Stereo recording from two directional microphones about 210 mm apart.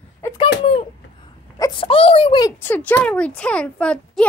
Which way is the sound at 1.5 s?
20° left (ahead or behind).